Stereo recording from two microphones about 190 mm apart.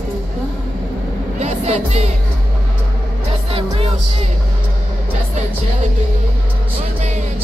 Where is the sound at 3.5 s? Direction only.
30° right (ahead or behind).